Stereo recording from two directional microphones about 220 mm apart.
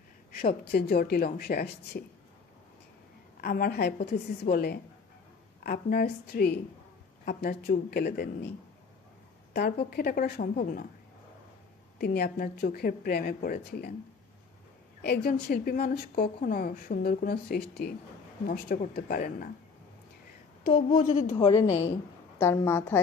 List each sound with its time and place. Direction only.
0.3 s speech: 40° left (ahead or behind)
3.3 s speech: 45° left (ahead or behind)
12.0 s speech: 45° left (ahead or behind)
15.0 s a woman's voice: 45° left (ahead or behind)
20.6 s a woman's voice: 40° left (ahead or behind)
21.4 s a woman's voice: 15° left (ahead or behind)